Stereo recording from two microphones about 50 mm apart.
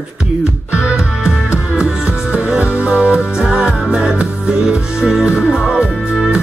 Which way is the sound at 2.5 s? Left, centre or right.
Right.